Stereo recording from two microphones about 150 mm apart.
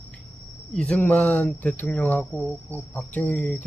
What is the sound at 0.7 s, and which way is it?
Speech, 5° left (ahead or behind).